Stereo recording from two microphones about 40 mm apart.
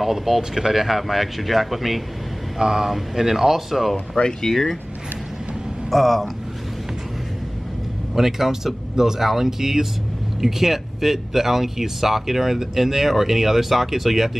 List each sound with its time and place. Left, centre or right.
0.0 s speech: centre
2.6 s speech: centre
4.2 s speech: left
4.5 s speech: centre
5.9 s speech: centre
8.1 s speech: centre